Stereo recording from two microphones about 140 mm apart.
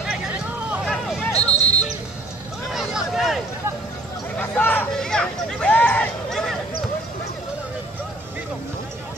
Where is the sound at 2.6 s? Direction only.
Centre (ahead or behind).